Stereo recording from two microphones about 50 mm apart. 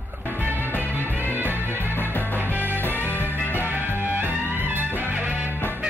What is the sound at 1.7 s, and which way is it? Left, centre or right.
Music, left.